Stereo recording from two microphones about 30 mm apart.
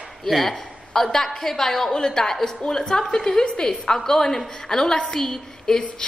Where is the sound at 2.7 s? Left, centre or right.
Left.